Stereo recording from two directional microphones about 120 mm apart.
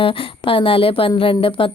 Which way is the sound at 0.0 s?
50° left (ahead or behind).